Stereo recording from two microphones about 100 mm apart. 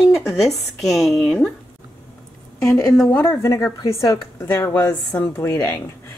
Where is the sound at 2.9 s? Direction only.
5° left (ahead or behind).